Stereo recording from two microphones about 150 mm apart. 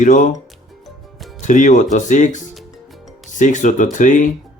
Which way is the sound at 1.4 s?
55° left (ahead or behind).